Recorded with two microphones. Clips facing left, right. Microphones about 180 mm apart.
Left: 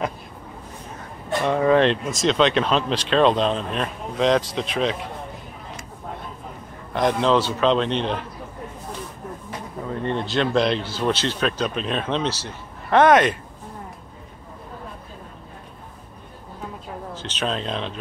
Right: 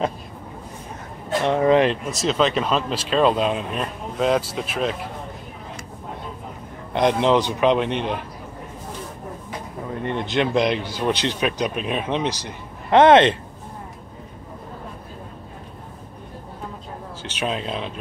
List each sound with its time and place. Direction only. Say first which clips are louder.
1.4 s speech: right 1 dB; 20° right (ahead or behind)
1.9 s speech: left 2 dB; 5° right (ahead or behind)
6.9 s speech: right 1 dB; 20° right (ahead or behind)
10.0 s speech: right 1 dB; 15° right (ahead or behind)
17.2 s speech: right 1 dB; 10° right (ahead or behind)